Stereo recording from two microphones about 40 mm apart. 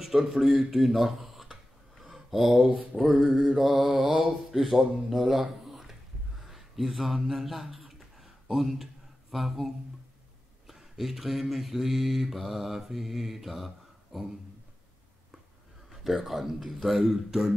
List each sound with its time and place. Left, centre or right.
0.0 s mantra: centre
0.7 s a sound: centre
2.3 s mantra: centre
2.7 s mantra: right
3.0 s mantra: centre
6.4 s a sound: centre
8.5 s speech: centre
9.3 s mantra: centre
10.7 s mantra: centre
15.9 s mantra: centre